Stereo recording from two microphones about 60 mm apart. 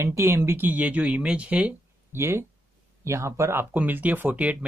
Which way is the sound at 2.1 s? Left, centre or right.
Right.